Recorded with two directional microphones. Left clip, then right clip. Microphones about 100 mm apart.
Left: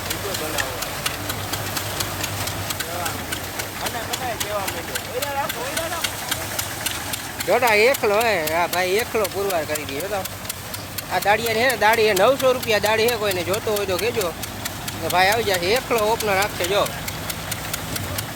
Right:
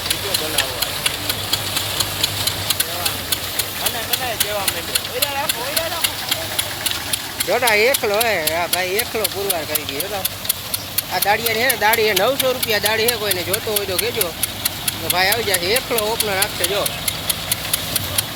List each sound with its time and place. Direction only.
7.5 s speech: 5° left (ahead or behind)
8.8 s speech: 25° left (ahead or behind)
9.2 s speech: centre (ahead or behind)
11.1 s speech: 10° left (ahead or behind)
15.1 s speech: 15° left (ahead or behind)